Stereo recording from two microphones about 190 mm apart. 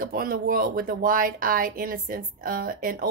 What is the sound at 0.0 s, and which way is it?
Speech, 50° right (ahead or behind).